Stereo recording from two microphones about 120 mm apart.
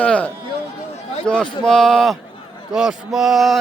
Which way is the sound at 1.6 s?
5° left (ahead or behind).